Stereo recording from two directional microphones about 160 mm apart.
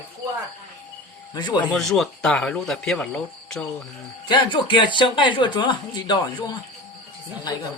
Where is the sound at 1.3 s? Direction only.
25° left (ahead or behind).